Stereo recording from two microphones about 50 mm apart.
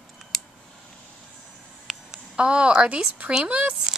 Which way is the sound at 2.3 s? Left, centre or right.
Centre.